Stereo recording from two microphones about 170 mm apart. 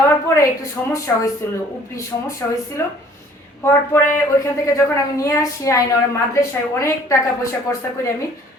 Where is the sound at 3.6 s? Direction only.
15° left (ahead or behind).